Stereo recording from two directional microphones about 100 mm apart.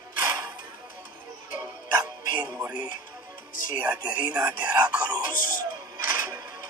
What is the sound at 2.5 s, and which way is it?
Speech, 20° right (ahead or behind).